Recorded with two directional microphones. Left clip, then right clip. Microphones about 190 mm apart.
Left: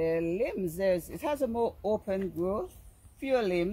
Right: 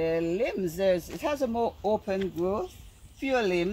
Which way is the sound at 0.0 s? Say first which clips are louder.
Right 2 dB; 5° left (ahead or behind).